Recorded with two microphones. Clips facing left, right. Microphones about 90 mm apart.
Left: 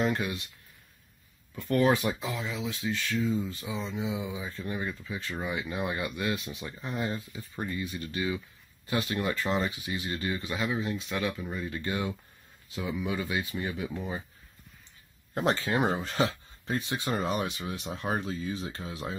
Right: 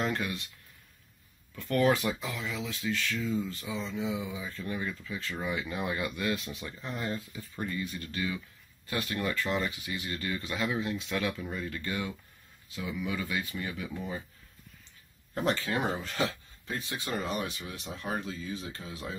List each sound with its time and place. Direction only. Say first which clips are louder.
0.0 s speech: left 3 dB; 15° left (ahead or behind)
1.5 s speech: left 1 dB; 15° left (ahead or behind)
10.5 s speech: right 1 dB; 5° left (ahead or behind)
11.7 s speech: left 3 dB; 25° left (ahead or behind)
13.7 s speech: left 4 dB; 30° left (ahead or behind)
15.6 s speech: left 4 dB; 25° left (ahead or behind)